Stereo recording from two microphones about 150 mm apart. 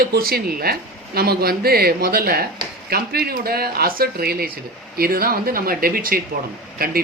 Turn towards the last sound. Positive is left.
turn(degrees=-75)  # may be behind; listen again after turning